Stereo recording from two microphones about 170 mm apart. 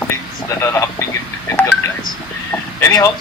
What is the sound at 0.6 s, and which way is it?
Speech, 15° left (ahead or behind).